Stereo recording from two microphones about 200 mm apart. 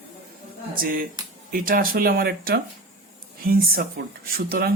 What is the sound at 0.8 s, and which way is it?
Speech, 45° right (ahead or behind).